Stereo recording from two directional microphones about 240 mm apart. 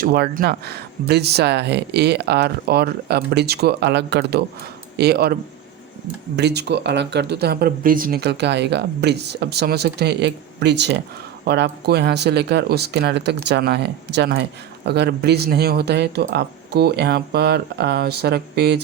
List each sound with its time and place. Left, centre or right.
0.0 s speech: right